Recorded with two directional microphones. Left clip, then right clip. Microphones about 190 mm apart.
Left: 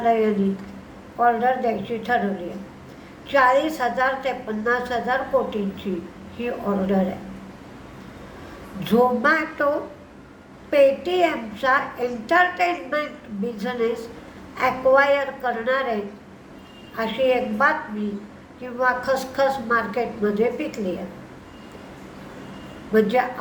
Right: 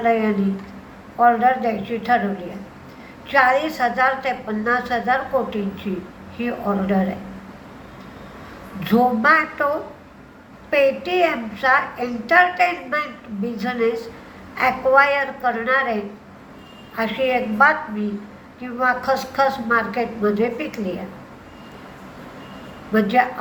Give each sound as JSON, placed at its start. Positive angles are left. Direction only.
{"t": 0.0, "sound": "a woman's voice", "side_deg": 15}
{"t": 3.2, "sound": "a woman's voice", "side_deg": 15}
{"t": 8.8, "sound": "a woman's voice", "side_deg": 15}
{"t": 10.7, "sound": "a woman's voice", "side_deg": 15}
{"t": 22.9, "sound": "a woman's voice", "side_deg": 15}